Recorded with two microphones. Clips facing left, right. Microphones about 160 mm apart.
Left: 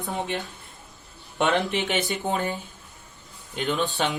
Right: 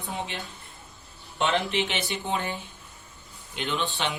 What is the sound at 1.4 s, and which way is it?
Speech, 45° left (ahead or behind).